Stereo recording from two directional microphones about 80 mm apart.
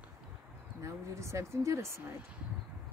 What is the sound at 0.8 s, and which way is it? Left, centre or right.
Speech, right.